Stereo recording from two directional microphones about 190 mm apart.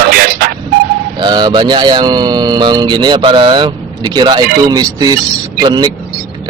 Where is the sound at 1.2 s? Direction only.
25° right (ahead or behind).